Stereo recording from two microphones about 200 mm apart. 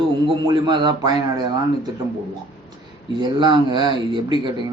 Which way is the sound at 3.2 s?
25° right (ahead or behind).